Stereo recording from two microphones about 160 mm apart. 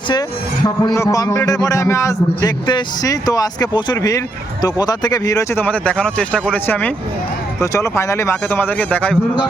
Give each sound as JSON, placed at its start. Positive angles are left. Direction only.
{"t": 0.1, "sound": "a man's voice", "side_deg": 25}